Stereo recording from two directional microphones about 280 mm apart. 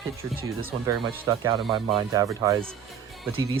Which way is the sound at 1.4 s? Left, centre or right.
Centre.